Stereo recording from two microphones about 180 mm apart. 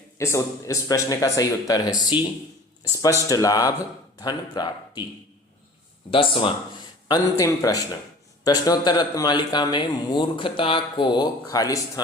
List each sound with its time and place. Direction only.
0.2 s speech: 15° left (ahead or behind)
6.1 s speech: 30° left (ahead or behind)
7.1 s speech: 20° left (ahead or behind)